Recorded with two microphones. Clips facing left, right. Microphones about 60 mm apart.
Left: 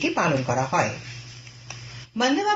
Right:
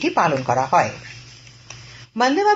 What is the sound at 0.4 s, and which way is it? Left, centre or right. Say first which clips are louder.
Speech: right 6 dB; right.